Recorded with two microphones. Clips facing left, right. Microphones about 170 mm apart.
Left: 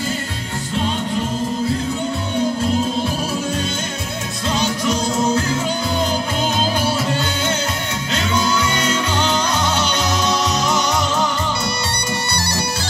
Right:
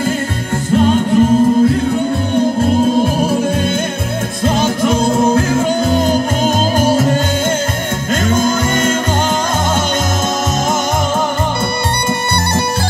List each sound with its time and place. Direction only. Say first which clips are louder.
0.7 s music: right 10 dB; 50° right (ahead or behind)
2.6 s music: right 7 dB; 50° right (ahead or behind)
4.6 s music: right 5 dB; 55° right (ahead or behind)
8.3 s music: right 5 dB; 50° right (ahead or behind)